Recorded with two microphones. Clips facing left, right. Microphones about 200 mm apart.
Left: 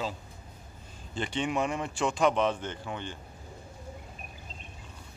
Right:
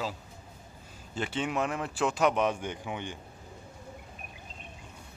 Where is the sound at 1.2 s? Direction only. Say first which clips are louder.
Left 1 dB; 5° right (ahead or behind).